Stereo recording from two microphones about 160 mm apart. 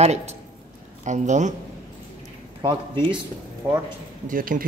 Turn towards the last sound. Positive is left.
turn(degrees=-60)  # may be behind; listen again after turning